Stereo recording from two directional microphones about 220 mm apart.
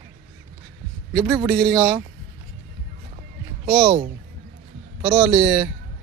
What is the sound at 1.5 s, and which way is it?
Speech, 5° left (ahead or behind).